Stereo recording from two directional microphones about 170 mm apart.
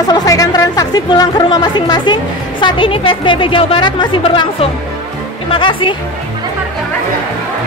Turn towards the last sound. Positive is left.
turn(degrees=30)  # may be behind; listen again after turning